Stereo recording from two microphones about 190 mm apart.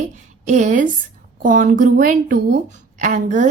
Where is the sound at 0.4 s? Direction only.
40° right (ahead or behind).